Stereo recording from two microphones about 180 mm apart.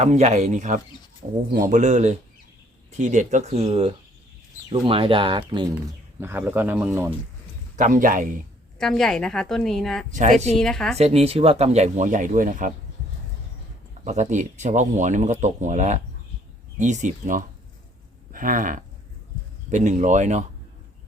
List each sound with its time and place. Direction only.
0.0 s speech: 40° right (ahead or behind); by 5.7 s 25° right (ahead or behind)
5.7 s speech: 10° right (ahead or behind)
7.8 s speech: 50° right (ahead or behind)
8.8 s a woman's voice: 5° left (ahead or behind)
10.1 s speech: 45° right (ahead or behind)
10.6 s a woman's voice: 5° left (ahead or behind)
10.9 s speech: 35° right (ahead or behind)
14.0 s speech: 40° right (ahead or behind)